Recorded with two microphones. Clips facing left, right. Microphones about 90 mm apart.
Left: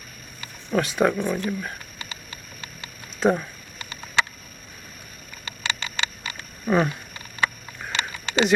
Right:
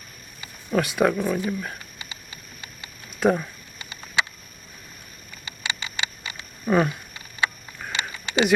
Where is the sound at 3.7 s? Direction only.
15° right (ahead or behind).